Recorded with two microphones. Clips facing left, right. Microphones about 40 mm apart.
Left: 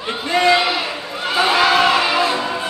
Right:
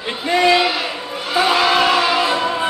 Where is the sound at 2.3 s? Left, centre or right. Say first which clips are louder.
Right 2 dB; centre.